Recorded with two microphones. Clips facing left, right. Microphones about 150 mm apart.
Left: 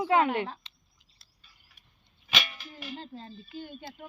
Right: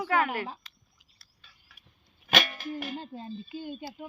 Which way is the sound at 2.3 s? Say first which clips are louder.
Right 7 dB; 50° right (ahead or behind).